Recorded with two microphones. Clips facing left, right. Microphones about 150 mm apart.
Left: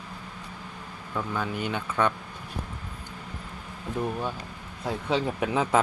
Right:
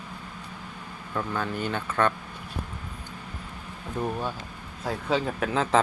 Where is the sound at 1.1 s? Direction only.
5° left (ahead or behind).